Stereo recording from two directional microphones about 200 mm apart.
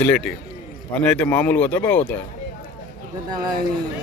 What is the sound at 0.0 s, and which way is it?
A man's voice, 5° left (ahead or behind).